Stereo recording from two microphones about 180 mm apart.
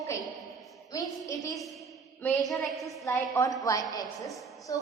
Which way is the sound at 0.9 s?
20° left (ahead or behind).